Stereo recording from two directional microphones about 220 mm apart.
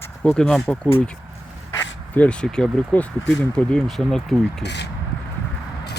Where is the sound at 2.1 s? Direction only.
5° left (ahead or behind).